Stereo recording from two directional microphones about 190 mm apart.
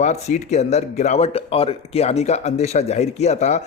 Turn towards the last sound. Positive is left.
turn(degrees=35)  # may be behind; listen again after turning